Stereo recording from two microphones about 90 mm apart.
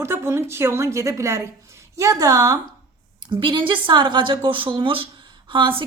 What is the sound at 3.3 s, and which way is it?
A woman's voice, 65° right (ahead or behind).